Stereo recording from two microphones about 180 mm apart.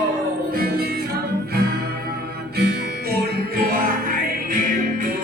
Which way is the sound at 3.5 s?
55° right (ahead or behind).